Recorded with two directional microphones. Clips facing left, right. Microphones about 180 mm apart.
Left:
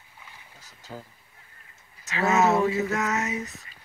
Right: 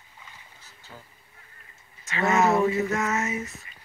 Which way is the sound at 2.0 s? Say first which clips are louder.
Even; centre (ahead or behind).